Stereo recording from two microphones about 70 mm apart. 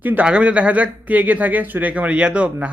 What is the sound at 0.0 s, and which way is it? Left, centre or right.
A man's voice, right.